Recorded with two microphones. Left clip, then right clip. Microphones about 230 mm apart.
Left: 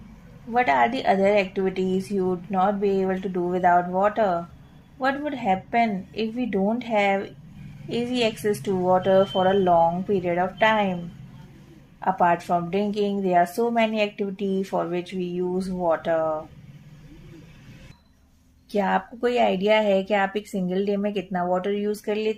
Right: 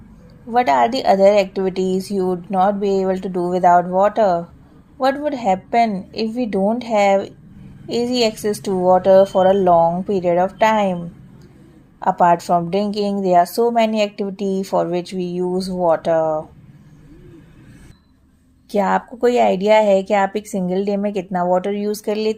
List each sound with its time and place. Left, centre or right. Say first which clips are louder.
0.5 s speech: right 5 dB; right
11.9 s speech: right 6 dB; right
18.7 s speech: right 6 dB; right